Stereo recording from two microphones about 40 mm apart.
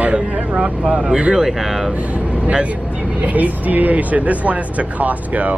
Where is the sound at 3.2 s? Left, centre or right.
Right.